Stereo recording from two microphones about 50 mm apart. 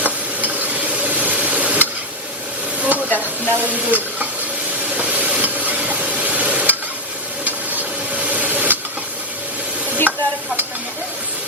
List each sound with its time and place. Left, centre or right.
0.0 s stir: right
2.8 s hiss: right
3.5 s speech: right
4.9 s a sound: right
10.1 s stir: right